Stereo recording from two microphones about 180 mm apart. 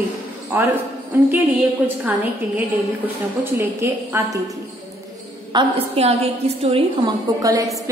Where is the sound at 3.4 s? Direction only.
15° right (ahead or behind).